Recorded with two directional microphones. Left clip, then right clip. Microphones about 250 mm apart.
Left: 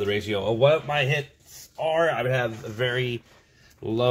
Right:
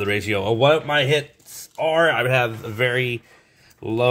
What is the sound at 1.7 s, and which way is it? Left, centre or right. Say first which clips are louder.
Speech: right 5 dB; right.